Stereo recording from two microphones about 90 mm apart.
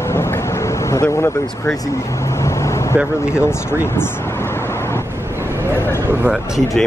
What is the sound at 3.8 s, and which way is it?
Vehicle, 25° left (ahead or behind).